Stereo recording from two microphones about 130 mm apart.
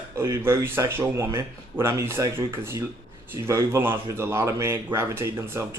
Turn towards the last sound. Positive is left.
turn(degrees=-20)  # may be behind; listen again after turning